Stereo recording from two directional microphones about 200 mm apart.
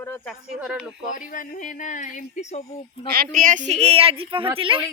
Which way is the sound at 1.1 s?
40° left (ahead or behind).